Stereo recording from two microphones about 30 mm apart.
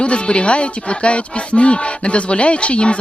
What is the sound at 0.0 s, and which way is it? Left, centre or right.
Speech, left.